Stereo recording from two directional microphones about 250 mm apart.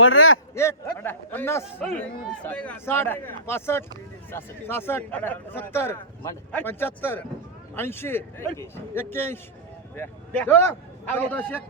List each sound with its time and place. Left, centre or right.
0.0 s a man's voice: left
0.5 s a man's voice: centre